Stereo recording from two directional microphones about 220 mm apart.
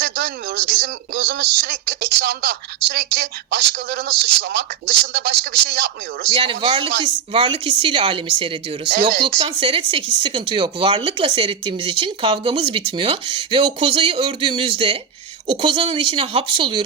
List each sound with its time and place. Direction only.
0.0 s speech: 45° right (ahead or behind)
6.2 s speech: 25° right (ahead or behind)